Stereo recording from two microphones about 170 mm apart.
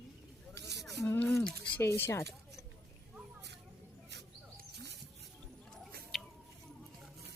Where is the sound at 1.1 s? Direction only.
15° left (ahead or behind).